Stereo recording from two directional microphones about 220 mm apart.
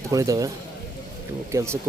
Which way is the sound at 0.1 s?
15° right (ahead or behind).